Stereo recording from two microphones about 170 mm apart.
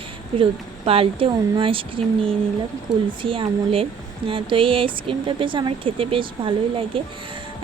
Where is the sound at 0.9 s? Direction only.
35° right (ahead or behind).